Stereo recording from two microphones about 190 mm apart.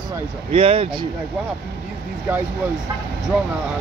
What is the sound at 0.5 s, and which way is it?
Speech, 30° right (ahead or behind).